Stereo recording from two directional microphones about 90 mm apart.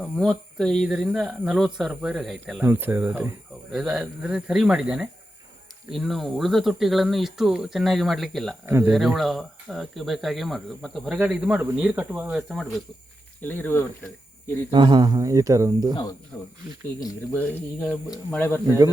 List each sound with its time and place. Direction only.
0.0 s speech: 5° left (ahead or behind)
2.6 s speech: 25° right (ahead or behind)
3.7 s speech: 5° right (ahead or behind)
11.2 s speech: 15° right (ahead or behind)
12.3 s speech: centre (ahead or behind)
13.4 s speech: 20° left (ahead or behind)
14.7 s speech: 60° right (ahead or behind)
15.2 s speech: 40° right (ahead or behind)
17.3 s speech: 15° left (ahead or behind)